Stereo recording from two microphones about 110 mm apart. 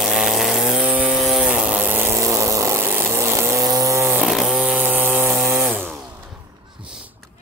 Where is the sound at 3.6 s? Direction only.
35° right (ahead or behind).